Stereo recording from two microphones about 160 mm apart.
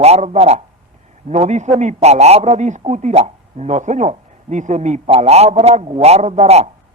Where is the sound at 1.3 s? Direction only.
45° right (ahead or behind).